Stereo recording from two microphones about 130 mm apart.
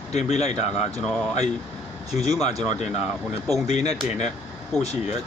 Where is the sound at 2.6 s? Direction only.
60° left (ahead or behind).